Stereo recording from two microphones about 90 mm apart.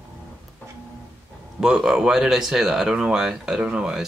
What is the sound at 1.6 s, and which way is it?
Speech, 5° right (ahead or behind).